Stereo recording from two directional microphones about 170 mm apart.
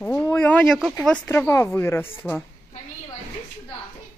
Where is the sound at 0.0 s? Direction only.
10° left (ahead or behind).